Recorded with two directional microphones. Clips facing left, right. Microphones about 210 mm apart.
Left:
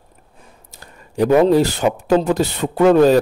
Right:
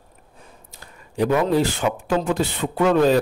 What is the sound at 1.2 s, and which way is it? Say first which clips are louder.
Speech: left 6 dB; 40° left (ahead or behind).